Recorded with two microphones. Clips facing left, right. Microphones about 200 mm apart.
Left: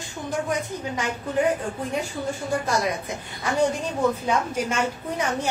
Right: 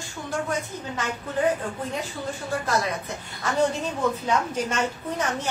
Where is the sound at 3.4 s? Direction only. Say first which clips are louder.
Left 1 dB; 15° left (ahead or behind).